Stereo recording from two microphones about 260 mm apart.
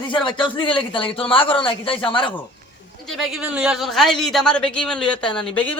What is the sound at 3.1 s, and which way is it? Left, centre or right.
Speech, centre.